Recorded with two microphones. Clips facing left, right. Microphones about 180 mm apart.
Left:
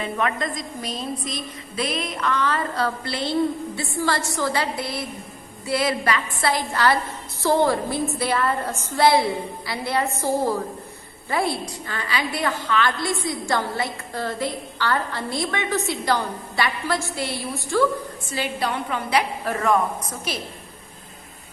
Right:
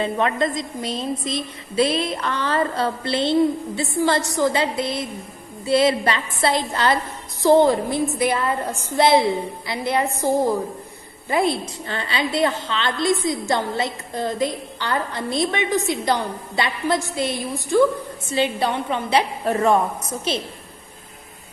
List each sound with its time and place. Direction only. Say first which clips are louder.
0.0 s a woman's voice: right 4 dB; 30° right (ahead or behind)